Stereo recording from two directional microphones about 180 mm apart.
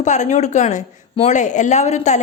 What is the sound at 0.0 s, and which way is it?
Speech, 40° left (ahead or behind).